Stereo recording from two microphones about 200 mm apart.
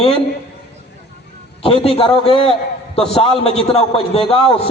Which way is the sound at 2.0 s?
30° left (ahead or behind).